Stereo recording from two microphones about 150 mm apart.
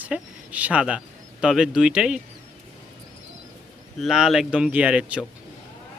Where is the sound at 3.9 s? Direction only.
Centre (ahead or behind).